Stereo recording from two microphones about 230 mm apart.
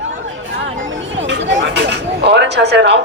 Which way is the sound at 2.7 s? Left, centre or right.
Right.